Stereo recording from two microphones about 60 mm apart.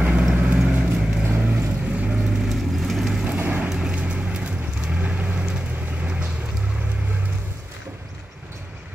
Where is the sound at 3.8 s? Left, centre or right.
Centre.